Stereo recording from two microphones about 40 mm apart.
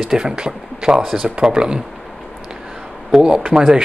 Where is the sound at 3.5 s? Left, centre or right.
Centre.